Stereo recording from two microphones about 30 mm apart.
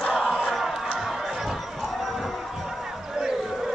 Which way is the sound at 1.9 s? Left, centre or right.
Centre.